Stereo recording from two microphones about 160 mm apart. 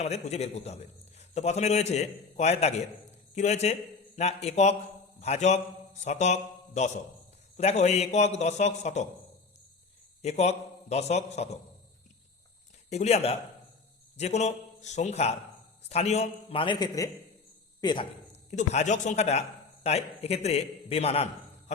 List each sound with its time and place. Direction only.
0.0 s a man's voice: 40° left (ahead or behind)
10.2 s a man's voice: 45° left (ahead or behind)
12.9 s a man's voice: 45° left (ahead or behind); by 18.0 s 25° left (ahead or behind)
18.3 s a man's voice: 45° left (ahead or behind)